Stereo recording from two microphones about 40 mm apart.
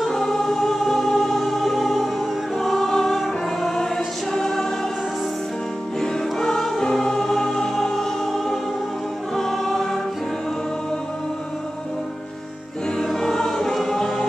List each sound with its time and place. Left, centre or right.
0.1 s music: centre
2.6 s choir: centre
5.9 s music: centre
9.4 s choir: centre
13.1 s choir: centre